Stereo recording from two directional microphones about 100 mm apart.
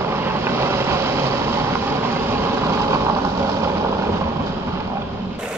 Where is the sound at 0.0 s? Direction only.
25° right (ahead or behind).